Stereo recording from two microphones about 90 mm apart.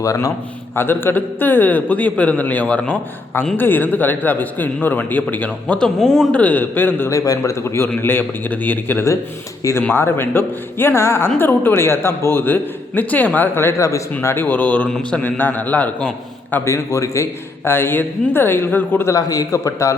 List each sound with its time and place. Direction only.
0.0 s a man's voice: 40° left (ahead or behind)
0.8 s a man's voice: 25° left (ahead or behind)
6.0 s a man's voice: centre (ahead or behind)
6.3 s a man's voice: 15° left (ahead or behind)
7.1 s a man's voice: 35° left (ahead or behind); by 14.8 s 20° left (ahead or behind)
14.8 s a man's voice: 5° left (ahead or behind)
15.2 s a man's voice: 20° left (ahead or behind)
16.6 s a man's voice: 35° left (ahead or behind)
19.1 s a man's voice: 40° left (ahead or behind)